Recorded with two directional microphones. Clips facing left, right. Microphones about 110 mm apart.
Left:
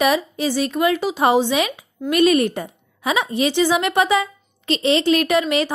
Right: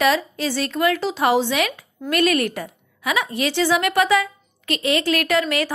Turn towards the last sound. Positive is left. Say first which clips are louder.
# left 2 dB
turn(degrees=20)  # may be behind; listen again after turning